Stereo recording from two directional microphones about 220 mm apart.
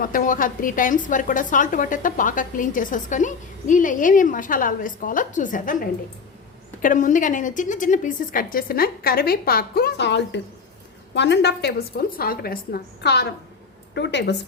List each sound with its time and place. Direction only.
0.0 s a woman's voice: 40° left (ahead or behind)